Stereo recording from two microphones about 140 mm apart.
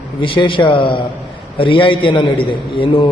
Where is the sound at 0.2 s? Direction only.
35° left (ahead or behind).